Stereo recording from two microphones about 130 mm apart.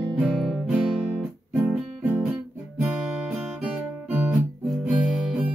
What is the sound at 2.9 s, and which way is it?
Guitar, 5° right (ahead or behind).